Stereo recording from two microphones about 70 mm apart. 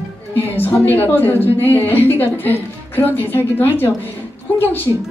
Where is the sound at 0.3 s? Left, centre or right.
Left.